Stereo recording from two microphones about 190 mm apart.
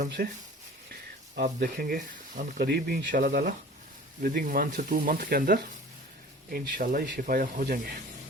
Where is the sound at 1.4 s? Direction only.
50° right (ahead or behind).